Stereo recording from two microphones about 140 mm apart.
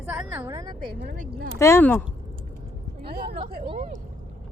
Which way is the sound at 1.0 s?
80° right.